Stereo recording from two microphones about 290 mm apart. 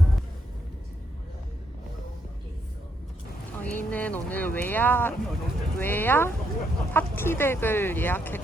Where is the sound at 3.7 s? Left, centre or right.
Centre.